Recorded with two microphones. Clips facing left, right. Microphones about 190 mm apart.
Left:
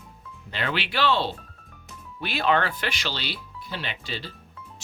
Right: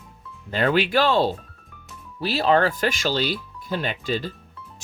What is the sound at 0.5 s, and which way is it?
Speech, 45° right (ahead or behind).